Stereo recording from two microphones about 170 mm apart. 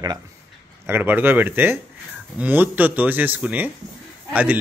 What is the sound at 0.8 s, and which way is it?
Speech, 10° right (ahead or behind).